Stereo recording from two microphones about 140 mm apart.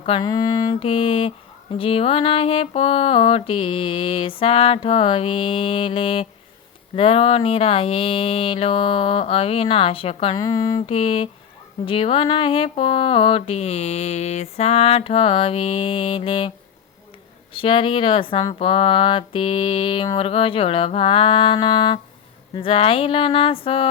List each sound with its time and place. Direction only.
0.2 s mantra: 25° left (ahead or behind)
0.8 s mantra: 40° left (ahead or behind)
10.3 s mantra: 25° left (ahead or behind)
10.8 s mantra: 40° left (ahead or behind)
17.5 s mantra: 40° left (ahead or behind)